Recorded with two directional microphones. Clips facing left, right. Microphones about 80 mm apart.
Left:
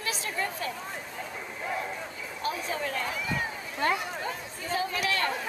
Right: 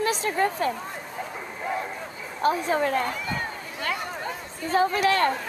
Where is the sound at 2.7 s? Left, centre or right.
Right.